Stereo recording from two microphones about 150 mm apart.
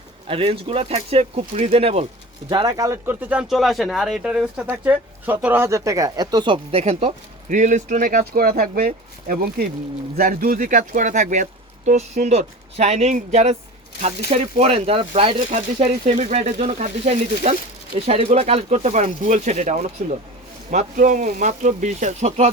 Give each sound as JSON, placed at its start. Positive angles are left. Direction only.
{"t": 0.3, "sound": "speech", "side_deg": -40}
{"t": 2.5, "sound": "speech", "side_deg": -30}
{"t": 3.1, "sound": "speech", "side_deg": -10}
{"t": 7.5, "sound": "speech", "side_deg": -55}
{"t": 16.2, "sound": "speech", "side_deg": -50}